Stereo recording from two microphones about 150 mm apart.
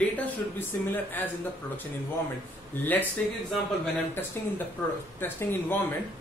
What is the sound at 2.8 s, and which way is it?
Speech, 10° left (ahead or behind).